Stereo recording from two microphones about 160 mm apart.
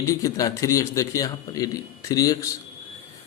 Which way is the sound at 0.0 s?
20° left (ahead or behind).